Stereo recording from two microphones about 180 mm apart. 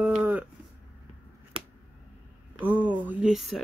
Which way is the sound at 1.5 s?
30° right (ahead or behind).